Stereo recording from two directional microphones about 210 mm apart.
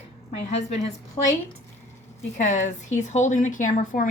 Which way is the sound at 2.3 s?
35° left (ahead or behind).